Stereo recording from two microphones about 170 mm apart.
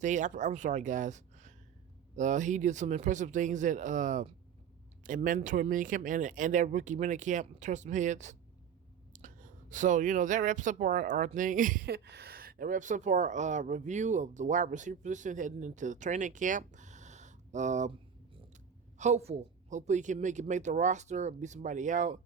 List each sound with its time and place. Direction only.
0.0 s speech: 45° right (ahead or behind)
18.9 s speech: 45° right (ahead or behind)